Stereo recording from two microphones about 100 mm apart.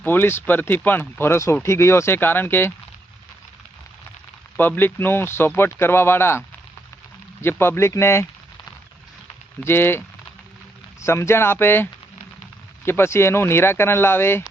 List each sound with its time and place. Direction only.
0.0 s speech: 20° left (ahead or behind)
4.5 s speech: 20° left (ahead or behind)
7.4 s speech: 25° left (ahead or behind)
9.6 s speech: 20° left (ahead or behind)
11.0 s speech: 25° left (ahead or behind)